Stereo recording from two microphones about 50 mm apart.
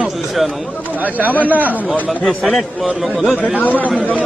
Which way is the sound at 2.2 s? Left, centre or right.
Centre.